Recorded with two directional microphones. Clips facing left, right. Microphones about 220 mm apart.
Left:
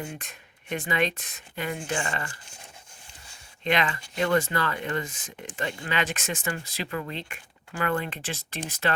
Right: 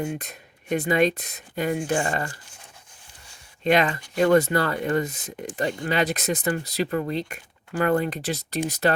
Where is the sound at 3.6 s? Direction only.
40° right (ahead or behind).